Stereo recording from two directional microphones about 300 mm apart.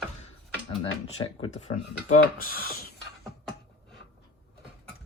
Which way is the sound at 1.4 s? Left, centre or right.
Left.